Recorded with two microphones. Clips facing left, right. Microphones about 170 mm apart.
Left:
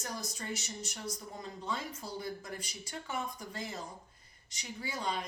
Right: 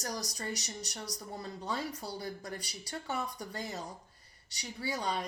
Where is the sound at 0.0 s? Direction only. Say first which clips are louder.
Right 3 dB; 40° right (ahead or behind).